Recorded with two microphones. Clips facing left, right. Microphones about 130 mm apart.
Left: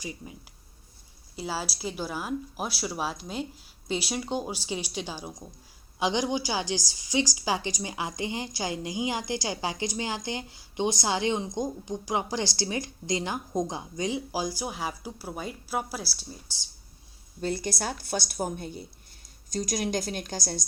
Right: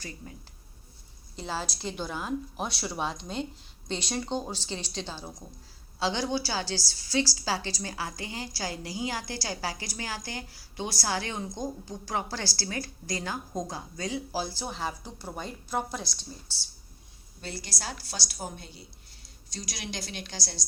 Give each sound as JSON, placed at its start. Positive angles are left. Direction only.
{"t": 0.0, "sound": "a woman's voice", "side_deg": 15}
{"t": 1.4, "sound": "a woman's voice", "side_deg": 5}
{"t": 17.4, "sound": "a woman's voice", "side_deg": 50}